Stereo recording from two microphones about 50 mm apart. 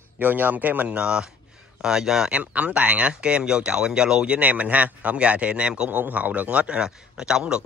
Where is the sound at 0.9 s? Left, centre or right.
Centre.